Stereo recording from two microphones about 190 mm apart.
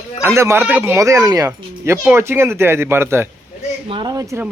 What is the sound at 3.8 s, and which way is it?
Speech, 25° right (ahead or behind).